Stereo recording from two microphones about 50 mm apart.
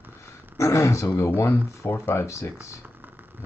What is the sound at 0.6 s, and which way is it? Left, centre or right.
Speech, left.